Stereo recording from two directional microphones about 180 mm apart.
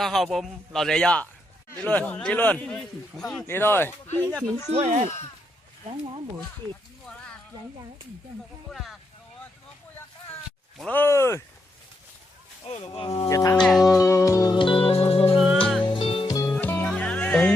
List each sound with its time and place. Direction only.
0.0 s a man's voice: centre (ahead or behind)
4.7 s speech: 40° right (ahead or behind)
8.7 s speech: centre (ahead or behind)
10.8 s a man's voice: 10° left (ahead or behind)
12.7 s speech: 30° left (ahead or behind)
13.1 s speech: 20° left (ahead or behind)
13.6 s speech: 5° left (ahead or behind)
13.8 s music: 20° left (ahead or behind); by 15.4 s 35° left (ahead or behind)
15.4 s music: centre (ahead or behind)
15.8 s music: 30° left (ahead or behind)
16.6 s music: 10° left (ahead or behind)